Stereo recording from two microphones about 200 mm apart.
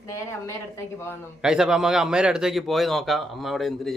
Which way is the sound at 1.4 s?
Centre (ahead or behind).